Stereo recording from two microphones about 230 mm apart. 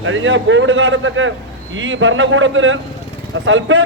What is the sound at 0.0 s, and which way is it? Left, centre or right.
A man's voice, right.